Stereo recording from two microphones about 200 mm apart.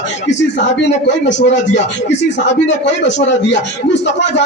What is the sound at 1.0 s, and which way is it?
A man's voice, 60° left (ahead or behind).